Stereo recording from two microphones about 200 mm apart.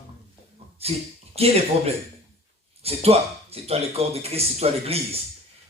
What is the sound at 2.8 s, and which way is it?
Speech, 30° right (ahead or behind).